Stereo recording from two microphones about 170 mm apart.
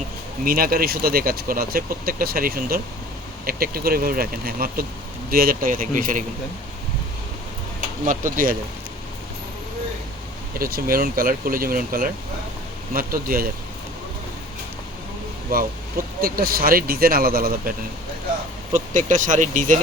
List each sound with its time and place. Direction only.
0.4 s speech: 60° right (ahead or behind)
8.0 s speech: 50° right (ahead or behind)
10.6 s speech: 60° right (ahead or behind)
15.5 s speech: 60° right (ahead or behind)
18.7 s speech: 50° right (ahead or behind)